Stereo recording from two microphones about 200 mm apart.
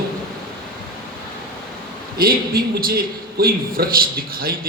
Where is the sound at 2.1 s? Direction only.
50° right (ahead or behind).